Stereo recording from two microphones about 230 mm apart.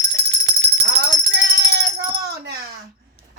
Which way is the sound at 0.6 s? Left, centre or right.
Right.